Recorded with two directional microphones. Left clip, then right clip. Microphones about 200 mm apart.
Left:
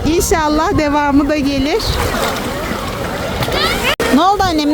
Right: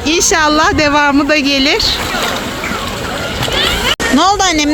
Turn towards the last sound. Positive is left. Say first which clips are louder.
# right 2 dB
turn(degrees=5)  # may be behind; listen again after turning